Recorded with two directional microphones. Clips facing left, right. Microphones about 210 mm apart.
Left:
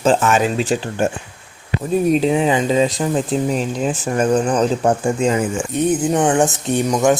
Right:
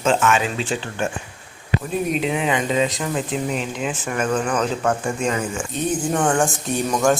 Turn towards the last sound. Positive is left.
turn(degrees=20)  # may be behind; listen again after turning